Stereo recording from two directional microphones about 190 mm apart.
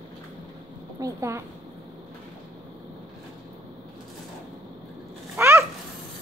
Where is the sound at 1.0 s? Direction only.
15° right (ahead or behind).